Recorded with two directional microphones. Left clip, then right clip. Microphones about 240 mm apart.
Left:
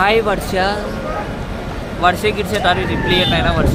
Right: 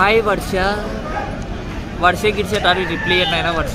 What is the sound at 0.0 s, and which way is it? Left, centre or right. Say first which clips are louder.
Speech: even; centre.